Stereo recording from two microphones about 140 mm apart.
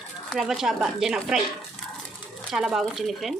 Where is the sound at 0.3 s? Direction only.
5° right (ahead or behind).